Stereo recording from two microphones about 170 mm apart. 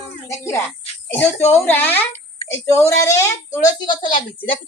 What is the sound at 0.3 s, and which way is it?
A woman's voice, 15° left (ahead or behind).